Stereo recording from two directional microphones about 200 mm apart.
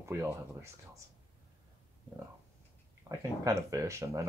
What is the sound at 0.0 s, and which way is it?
Speech, 15° right (ahead or behind).